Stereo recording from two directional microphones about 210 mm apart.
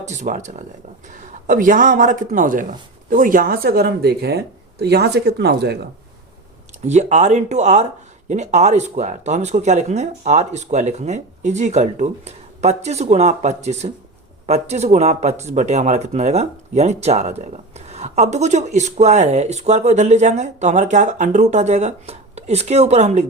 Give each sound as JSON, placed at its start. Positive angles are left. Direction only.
{"t": 0.0, "sound": "speech", "side_deg": -35}
{"t": 6.8, "sound": "speech", "side_deg": -35}